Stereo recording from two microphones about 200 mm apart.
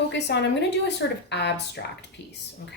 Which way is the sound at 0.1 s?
55° left (ahead or behind).